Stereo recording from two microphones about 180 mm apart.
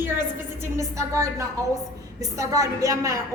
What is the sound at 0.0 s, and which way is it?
Music, 10° right (ahead or behind).